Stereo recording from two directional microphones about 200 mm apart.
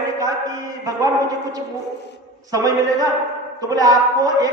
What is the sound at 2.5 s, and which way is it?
A man's voice, 20° right (ahead or behind).